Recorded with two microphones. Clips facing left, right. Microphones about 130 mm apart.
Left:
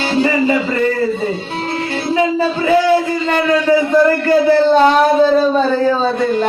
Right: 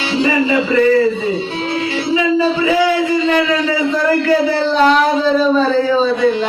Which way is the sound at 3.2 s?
50° left (ahead or behind).